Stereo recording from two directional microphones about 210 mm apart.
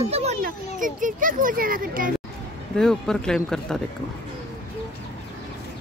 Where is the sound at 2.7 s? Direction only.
5° left (ahead or behind).